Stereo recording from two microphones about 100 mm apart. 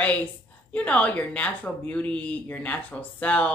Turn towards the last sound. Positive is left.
turn(degrees=15)  # may be behind; listen again after turning